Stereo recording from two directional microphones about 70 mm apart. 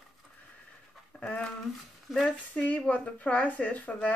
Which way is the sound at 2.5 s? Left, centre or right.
Left.